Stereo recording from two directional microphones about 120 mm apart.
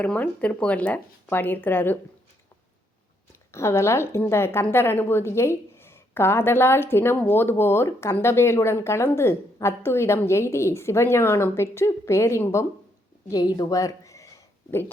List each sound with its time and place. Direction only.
0.0 s speech: 10° left (ahead or behind)
3.5 s speech: 25° left (ahead or behind)
13.3 s a sound: 35° left (ahead or behind)